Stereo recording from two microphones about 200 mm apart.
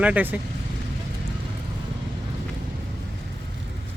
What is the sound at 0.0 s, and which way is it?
Speech, 10° right (ahead or behind).